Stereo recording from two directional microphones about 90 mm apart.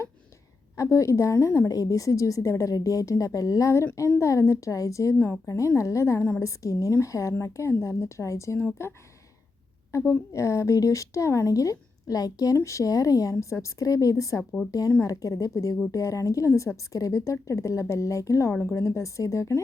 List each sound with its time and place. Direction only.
0.8 s speech: 35° left (ahead or behind)
10.1 s speech: 35° left (ahead or behind)